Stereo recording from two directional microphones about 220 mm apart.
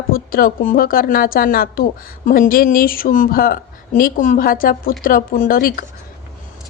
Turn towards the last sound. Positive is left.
turn(degrees=40)  # may be behind; listen again after turning